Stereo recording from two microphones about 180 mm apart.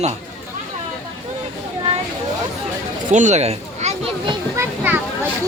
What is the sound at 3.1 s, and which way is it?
Speech, 40° right (ahead or behind).